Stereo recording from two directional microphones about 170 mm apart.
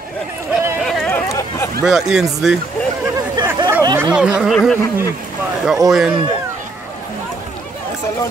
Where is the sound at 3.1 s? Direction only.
25° right (ahead or behind).